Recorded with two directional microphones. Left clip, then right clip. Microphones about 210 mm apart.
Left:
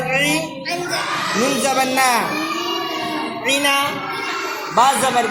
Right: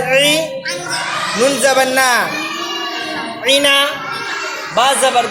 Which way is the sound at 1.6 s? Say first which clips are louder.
Right 4 dB; 40° right (ahead or behind).